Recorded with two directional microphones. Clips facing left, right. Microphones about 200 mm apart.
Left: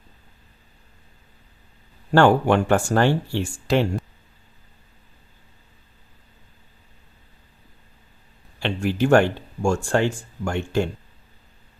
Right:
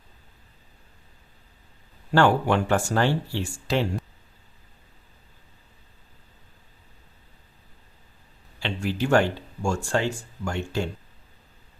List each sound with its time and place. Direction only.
2.1 s speech: 50° left (ahead or behind)
8.6 s speech: 55° left (ahead or behind)